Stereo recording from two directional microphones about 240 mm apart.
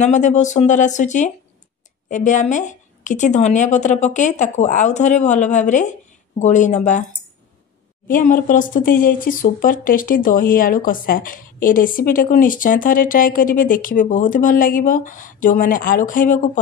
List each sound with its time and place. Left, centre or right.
0.0 s a woman's voice: left